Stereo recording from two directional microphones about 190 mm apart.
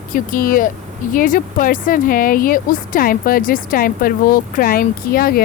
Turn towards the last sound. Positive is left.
turn(degrees=50)  # may be behind; listen again after turning